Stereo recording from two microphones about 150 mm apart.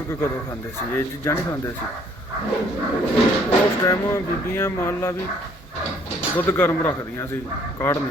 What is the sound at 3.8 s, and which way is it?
Speech, 20° left (ahead or behind).